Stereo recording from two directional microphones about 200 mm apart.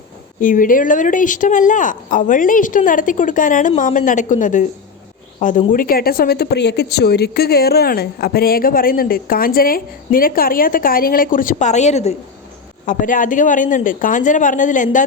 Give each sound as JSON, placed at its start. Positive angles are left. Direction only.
{"t": 0.3, "sound": "speech", "side_deg": 40}